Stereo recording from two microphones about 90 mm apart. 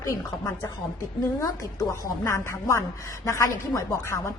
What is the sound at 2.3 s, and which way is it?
Speech, 35° left (ahead or behind).